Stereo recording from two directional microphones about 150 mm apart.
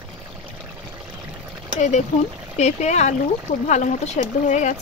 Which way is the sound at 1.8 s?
50° left (ahead or behind).